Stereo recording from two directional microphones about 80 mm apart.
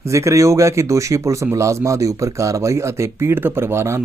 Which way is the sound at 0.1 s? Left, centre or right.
Right.